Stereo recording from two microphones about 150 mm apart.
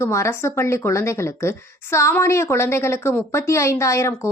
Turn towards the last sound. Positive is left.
turn(degrees=20)  # may be behind; listen again after turning